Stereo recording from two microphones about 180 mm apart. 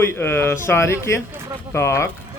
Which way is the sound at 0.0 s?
10° left (ahead or behind).